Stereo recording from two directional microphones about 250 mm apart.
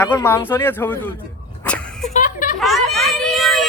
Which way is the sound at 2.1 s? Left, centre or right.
Left.